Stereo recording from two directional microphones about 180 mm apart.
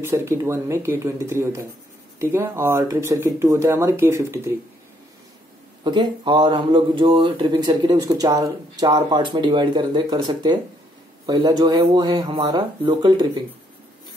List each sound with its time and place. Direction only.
0.0 s speech: 15° right (ahead or behind)
5.9 s speech: 25° right (ahead or behind)